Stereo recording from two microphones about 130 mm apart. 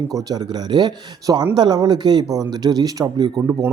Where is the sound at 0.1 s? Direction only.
30° right (ahead or behind).